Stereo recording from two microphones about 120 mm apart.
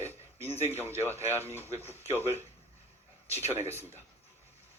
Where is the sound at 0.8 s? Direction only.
20° right (ahead or behind).